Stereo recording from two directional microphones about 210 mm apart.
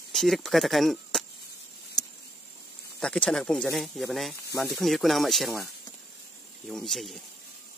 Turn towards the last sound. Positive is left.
turn(degrees=0)  # may be behind; listen again after turning